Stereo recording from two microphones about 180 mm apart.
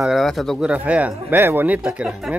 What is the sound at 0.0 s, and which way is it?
Speech, centre (ahead or behind).